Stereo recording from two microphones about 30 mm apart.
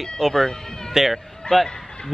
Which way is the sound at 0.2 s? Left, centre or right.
Centre.